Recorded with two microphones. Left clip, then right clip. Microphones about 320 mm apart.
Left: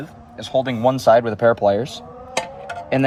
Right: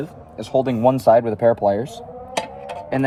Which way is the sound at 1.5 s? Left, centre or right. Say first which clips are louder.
Left 2 dB; centre.